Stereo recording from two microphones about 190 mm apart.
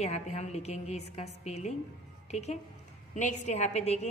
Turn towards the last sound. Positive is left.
turn(degrees=35)  # may be behind; listen again after turning